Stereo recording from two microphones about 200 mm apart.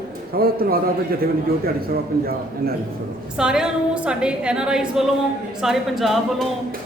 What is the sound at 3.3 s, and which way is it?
A woman's voice, 5° right (ahead or behind).